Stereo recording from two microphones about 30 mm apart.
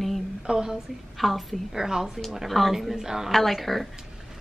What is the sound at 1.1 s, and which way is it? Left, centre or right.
Speech, centre.